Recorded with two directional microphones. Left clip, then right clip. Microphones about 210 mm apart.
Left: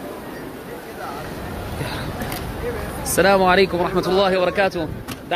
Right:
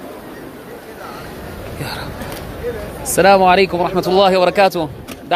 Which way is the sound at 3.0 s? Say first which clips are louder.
Right 5 dB; 20° right (ahead or behind).